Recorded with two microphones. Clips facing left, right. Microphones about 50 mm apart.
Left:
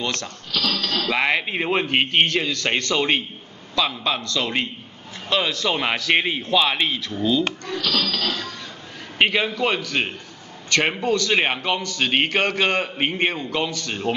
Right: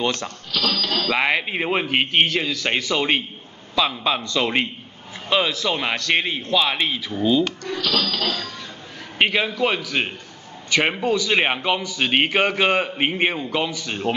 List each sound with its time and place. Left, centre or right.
0.0 s a man's voice: centre
4.2 s a man's voice: centre
5.3 s a man's voice: centre
7.0 s a man's voice: centre
8.0 s a man's voice: centre